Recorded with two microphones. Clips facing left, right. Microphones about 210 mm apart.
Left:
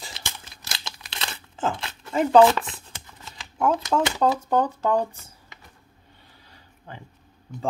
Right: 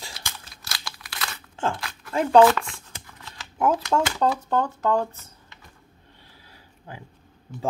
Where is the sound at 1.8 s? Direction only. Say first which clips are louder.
Left 1 dB; 25° left (ahead or behind).